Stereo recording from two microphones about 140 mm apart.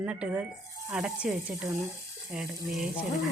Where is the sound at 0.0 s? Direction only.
10° right (ahead or behind).